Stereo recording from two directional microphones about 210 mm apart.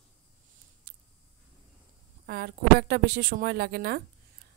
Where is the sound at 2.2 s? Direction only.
50° right (ahead or behind).